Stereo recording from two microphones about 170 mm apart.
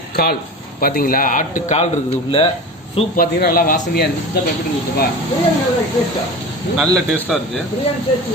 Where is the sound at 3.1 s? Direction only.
60° left (ahead or behind).